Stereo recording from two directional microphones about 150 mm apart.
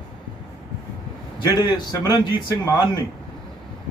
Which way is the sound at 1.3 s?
30° left (ahead or behind).